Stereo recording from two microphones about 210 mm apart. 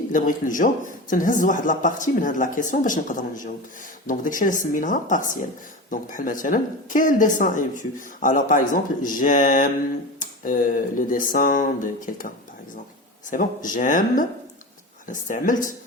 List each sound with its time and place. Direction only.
0.1 s speech: 40° left (ahead or behind)
13.3 s speech: 40° left (ahead or behind)